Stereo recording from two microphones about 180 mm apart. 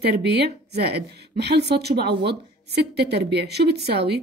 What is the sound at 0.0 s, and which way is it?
A woman's voice, 65° right (ahead or behind).